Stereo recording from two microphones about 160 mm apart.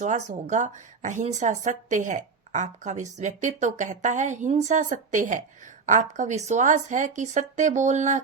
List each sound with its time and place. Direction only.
0.0 s a woman's voice: 50° right (ahead or behind)